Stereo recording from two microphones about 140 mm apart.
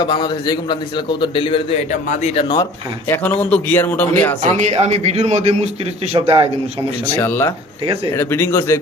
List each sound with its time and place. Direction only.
0.0 s a man's voice: 35° left (ahead or behind)
1.9 s speech: 50° left (ahead or behind)
3.1 s speech: 10° left (ahead or behind)
4.4 s a man's voice: 50° right (ahead or behind)
6.1 s a man's voice: 40° right (ahead or behind)
7.2 s speech: 15° left (ahead or behind)